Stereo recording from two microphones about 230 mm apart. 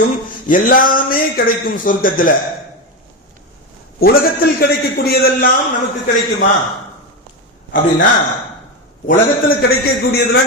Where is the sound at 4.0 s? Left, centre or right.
Left.